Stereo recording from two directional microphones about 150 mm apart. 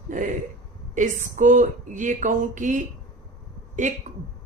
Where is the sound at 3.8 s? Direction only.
60° right (ahead or behind).